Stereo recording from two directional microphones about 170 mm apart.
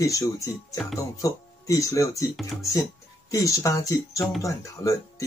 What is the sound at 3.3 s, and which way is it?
Speech, 20° left (ahead or behind).